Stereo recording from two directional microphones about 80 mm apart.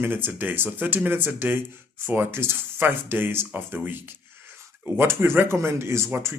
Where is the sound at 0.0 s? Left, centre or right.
Right.